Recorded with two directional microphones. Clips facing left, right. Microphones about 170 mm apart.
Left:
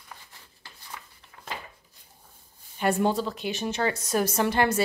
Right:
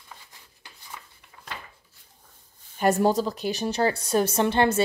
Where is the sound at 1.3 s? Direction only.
20° right (ahead or behind).